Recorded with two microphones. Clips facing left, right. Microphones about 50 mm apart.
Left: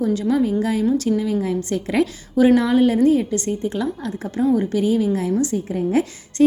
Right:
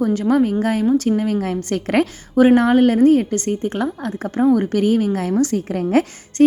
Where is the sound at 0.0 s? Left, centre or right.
Right.